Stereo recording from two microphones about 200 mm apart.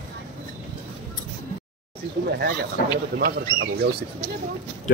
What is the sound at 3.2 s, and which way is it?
Speech, 50° right (ahead or behind).